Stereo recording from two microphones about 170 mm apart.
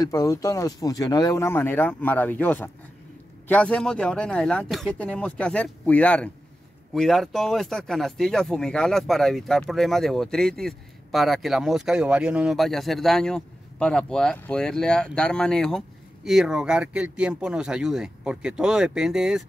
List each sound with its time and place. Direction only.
0.0 s speech: 20° left (ahead or behind); by 19.4 s 5° right (ahead or behind)